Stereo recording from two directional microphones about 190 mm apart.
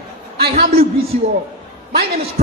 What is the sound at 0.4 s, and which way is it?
Speech, 55° right (ahead or behind).